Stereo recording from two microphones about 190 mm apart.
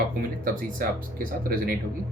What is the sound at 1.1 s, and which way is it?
Speech, 50° right (ahead or behind).